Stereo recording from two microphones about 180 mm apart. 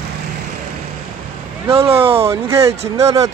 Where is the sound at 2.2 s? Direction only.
15° right (ahead or behind).